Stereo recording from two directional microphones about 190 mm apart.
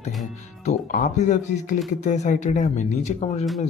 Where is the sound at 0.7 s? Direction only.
40° left (ahead or behind).